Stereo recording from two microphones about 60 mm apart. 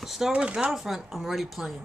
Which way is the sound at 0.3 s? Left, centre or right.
Centre.